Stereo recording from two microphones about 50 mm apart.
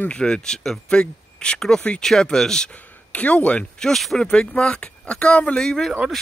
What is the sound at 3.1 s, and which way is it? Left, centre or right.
Speech, left.